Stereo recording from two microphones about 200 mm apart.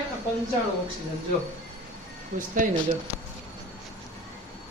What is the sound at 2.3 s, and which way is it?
Speech, 40° right (ahead or behind).